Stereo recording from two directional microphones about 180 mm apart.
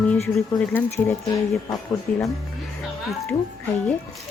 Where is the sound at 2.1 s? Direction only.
5° left (ahead or behind).